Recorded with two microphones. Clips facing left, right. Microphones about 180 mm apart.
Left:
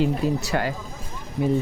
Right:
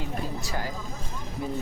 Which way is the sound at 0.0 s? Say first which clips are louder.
Left 11 dB; 70° left (ahead or behind).